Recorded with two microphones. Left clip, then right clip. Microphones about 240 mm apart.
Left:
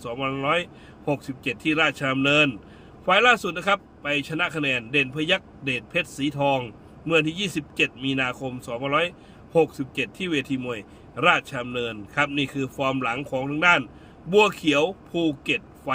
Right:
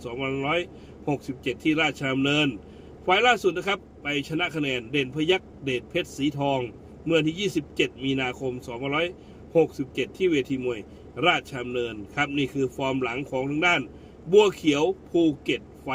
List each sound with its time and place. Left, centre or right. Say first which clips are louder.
0.4 s a man's voice: left 3 dB; centre